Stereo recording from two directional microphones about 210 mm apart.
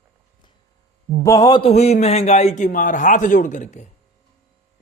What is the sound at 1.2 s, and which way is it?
A man's voice, 15° left (ahead or behind).